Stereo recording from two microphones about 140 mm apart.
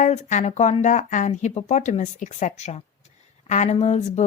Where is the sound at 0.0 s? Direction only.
55° left (ahead or behind).